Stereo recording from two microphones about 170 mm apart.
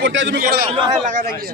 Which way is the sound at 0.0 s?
90° right.